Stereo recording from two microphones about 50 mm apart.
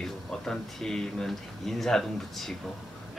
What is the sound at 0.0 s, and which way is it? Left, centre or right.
Speech, centre.